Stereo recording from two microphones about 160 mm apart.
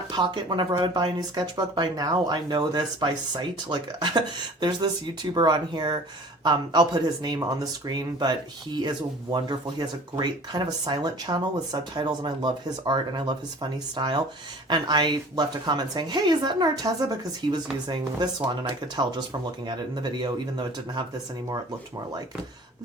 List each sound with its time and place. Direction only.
0.1 s speech: 30° right (ahead or behind)
5.3 s speech: 25° right (ahead or behind)